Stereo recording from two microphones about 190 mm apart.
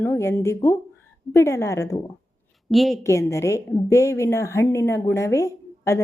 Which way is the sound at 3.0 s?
15° left (ahead or behind).